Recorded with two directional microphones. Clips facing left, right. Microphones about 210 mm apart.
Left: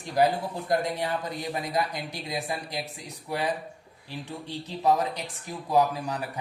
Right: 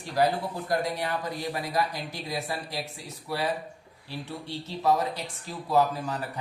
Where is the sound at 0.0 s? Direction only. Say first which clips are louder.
Left 1 dB; 15° left (ahead or behind).